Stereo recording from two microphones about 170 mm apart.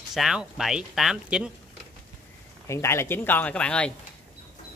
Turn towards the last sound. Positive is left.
turn(degrees=5)  # may be behind; listen again after turning